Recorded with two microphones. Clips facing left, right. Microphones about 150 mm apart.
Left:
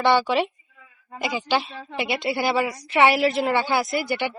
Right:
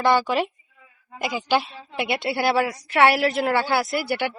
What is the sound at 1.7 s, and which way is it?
Speech, 60° left (ahead or behind).